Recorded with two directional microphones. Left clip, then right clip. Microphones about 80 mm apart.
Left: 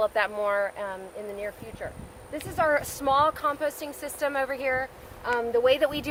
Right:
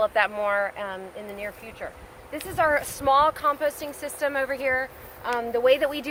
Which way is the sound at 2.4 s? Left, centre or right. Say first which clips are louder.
Right 2 dB; left.